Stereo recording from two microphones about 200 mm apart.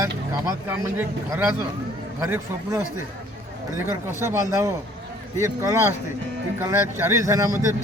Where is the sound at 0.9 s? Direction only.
10° right (ahead or behind).